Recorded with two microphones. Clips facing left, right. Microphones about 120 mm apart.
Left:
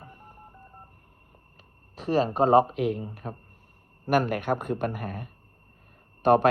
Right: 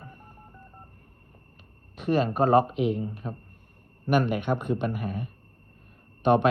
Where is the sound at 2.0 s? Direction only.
35° left (ahead or behind).